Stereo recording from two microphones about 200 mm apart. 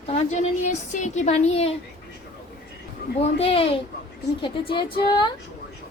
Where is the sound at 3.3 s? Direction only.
30° left (ahead or behind).